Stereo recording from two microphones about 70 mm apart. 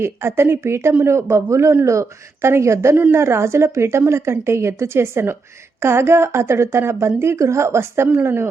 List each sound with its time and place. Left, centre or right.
0.0 s a woman's voice: right